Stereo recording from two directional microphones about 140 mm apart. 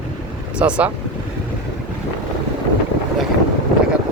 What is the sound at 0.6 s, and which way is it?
Speech, 10° right (ahead or behind).